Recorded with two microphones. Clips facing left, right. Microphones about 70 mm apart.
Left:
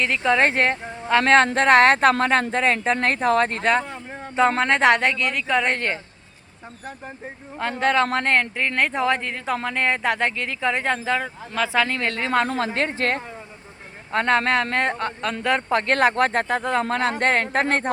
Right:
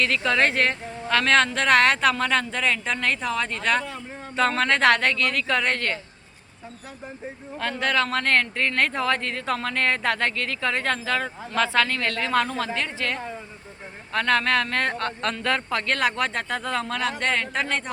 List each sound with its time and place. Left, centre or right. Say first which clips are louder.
0.0 s a woman's voice: left 2 dB; centre; by 3.7 s left
3.7 s a woman's voice: left 3 dB; left
7.6 s a man's voice: left 4 dB; left
14.1 s a woman's voice: left 2 dB; left